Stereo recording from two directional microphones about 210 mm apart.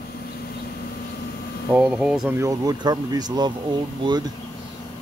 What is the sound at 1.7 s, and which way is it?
Speech, 5° right (ahead or behind).